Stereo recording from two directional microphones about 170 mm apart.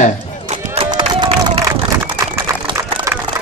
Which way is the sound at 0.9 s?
30° right (ahead or behind).